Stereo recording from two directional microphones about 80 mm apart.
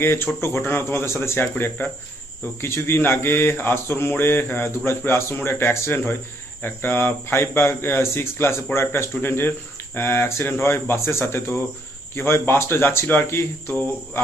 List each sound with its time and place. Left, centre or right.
0.4 s speech: left